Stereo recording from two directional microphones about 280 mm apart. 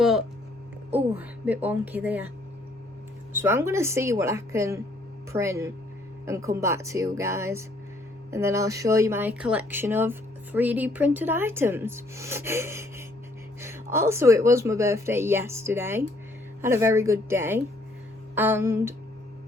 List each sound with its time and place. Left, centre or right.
0.0 s a sound: centre
1.1 s speech: centre
3.3 s speech: centre